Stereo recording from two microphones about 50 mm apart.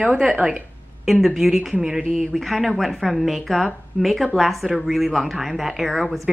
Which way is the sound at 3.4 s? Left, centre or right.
Centre.